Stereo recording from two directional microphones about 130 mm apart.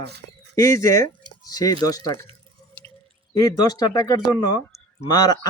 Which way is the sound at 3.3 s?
30° left (ahead or behind).